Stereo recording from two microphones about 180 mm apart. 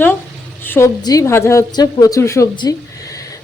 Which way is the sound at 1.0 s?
20° left (ahead or behind).